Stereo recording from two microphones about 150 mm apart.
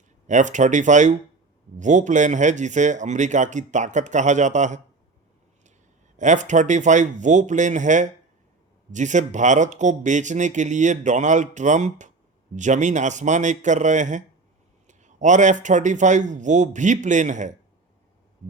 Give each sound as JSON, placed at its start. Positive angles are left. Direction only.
{"t": 0.3, "sound": "a man's voice", "side_deg": -55}
{"t": 6.1, "sound": "a man's voice", "side_deg": -55}